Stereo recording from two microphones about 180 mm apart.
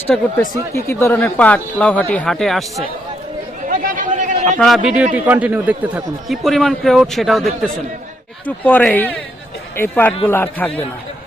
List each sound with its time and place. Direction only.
0.1 s speech: 10° left (ahead or behind)
3.7 s a sound: 45° right (ahead or behind)
5.1 s a man's voice: 10° right (ahead or behind); by 10.8 s 10° left (ahead or behind)